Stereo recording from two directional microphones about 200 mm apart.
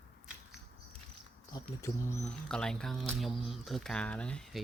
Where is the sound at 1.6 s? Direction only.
15° left (ahead or behind).